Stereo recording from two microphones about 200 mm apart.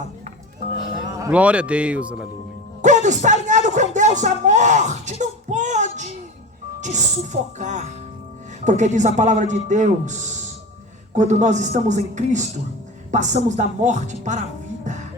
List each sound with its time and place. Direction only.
1.1 s a man's voice: 10° right (ahead or behind)
2.8 s speech: 35° right (ahead or behind)
5.2 s child singing: 35° right (ahead or behind)
6.7 s speech: 35° right (ahead or behind)